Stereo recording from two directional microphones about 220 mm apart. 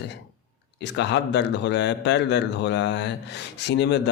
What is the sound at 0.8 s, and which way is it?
Speech, 50° left (ahead or behind).